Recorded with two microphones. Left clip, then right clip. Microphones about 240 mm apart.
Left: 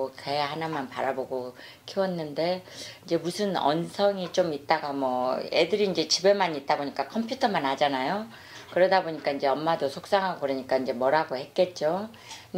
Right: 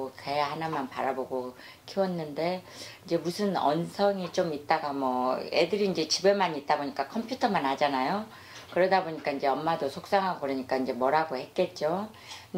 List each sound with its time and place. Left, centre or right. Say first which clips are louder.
0.2 s speech: right 2 dB; left